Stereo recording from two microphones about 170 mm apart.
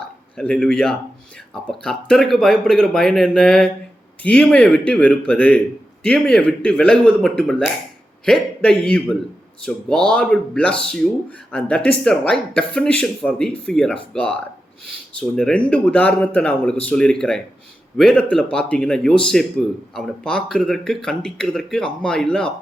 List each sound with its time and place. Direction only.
0.3 s a man's voice: 5° left (ahead or behind)